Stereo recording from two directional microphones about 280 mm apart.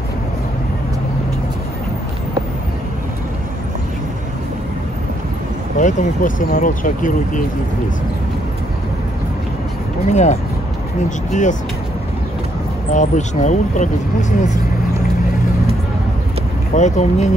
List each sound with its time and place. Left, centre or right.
5.8 s speech: left
10.0 s speech: left
12.9 s speech: left
16.7 s speech: left